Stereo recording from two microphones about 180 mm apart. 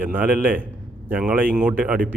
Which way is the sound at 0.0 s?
10° right (ahead or behind).